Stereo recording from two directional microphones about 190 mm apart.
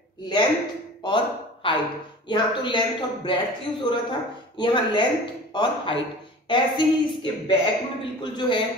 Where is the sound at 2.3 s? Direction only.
25° left (ahead or behind).